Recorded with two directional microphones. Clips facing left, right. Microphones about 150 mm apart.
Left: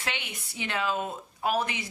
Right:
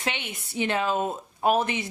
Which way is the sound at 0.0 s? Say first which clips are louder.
Right 4 dB; 25° right (ahead or behind).